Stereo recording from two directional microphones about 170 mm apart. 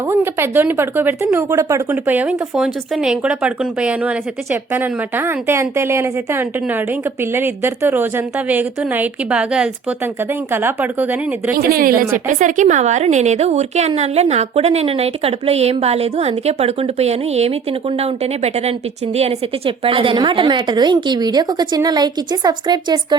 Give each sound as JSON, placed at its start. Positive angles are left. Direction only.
{"t": 0.1, "sound": "speech", "side_deg": -15}
{"t": 11.5, "sound": "a woman's voice", "side_deg": -60}